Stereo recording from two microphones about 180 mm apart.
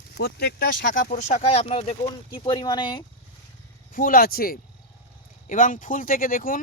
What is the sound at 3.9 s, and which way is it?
Speech, 50° left (ahead or behind).